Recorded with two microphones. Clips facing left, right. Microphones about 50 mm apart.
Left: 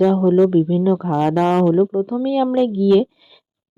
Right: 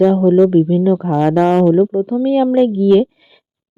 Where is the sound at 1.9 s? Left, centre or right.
Right.